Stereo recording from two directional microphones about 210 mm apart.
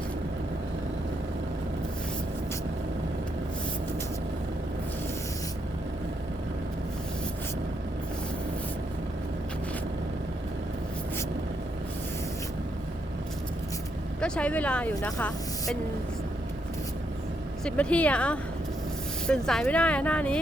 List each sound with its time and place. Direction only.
14.2 s speech: 5° left (ahead or behind)
17.7 s speech: 5° left (ahead or behind)